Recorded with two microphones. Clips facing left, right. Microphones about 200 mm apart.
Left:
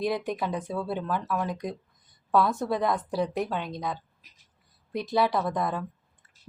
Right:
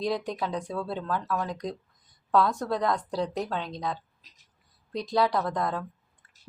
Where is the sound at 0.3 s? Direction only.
5° left (ahead or behind).